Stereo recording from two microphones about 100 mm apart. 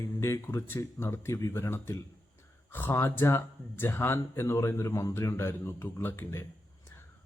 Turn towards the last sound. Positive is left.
turn(degrees=25)  # may be behind; listen again after turning